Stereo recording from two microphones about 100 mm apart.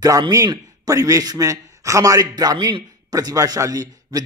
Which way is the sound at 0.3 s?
35° right (ahead or behind).